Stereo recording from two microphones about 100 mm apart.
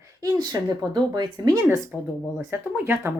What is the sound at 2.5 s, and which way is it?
Speech, 20° right (ahead or behind).